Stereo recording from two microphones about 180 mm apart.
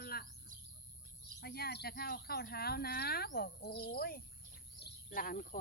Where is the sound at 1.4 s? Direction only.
60° left (ahead or behind).